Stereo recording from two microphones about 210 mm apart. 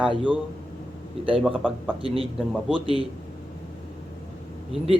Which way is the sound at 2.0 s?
25° right (ahead or behind).